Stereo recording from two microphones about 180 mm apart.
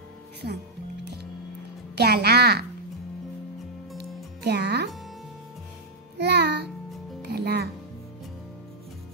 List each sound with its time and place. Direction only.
2.0 s music: 60° right (ahead or behind)
4.4 s music: 65° right (ahead or behind)
6.1 s music: 70° right (ahead or behind)